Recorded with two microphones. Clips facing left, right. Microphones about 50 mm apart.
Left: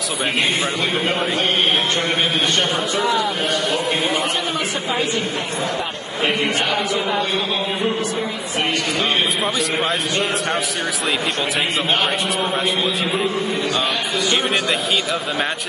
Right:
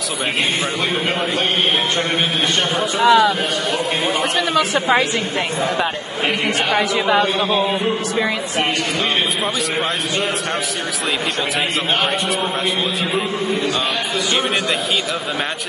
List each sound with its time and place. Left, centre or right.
3.0 s speech: right